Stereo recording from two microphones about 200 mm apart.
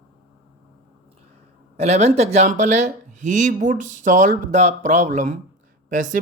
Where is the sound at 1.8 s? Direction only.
35° right (ahead or behind).